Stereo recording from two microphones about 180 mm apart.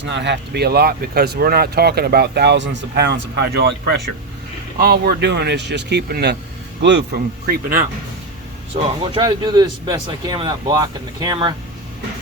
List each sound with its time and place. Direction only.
0.0 s speech: 75° right (ahead or behind); by 7.9 s 55° right (ahead or behind)
9.2 s speech: 25° right (ahead or behind)